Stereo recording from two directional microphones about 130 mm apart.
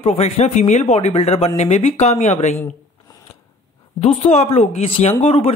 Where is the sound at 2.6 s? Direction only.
25° left (ahead or behind).